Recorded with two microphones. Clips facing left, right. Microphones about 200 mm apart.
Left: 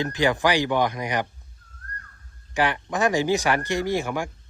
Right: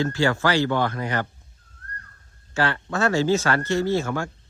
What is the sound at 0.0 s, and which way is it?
Speech, 15° left (ahead or behind).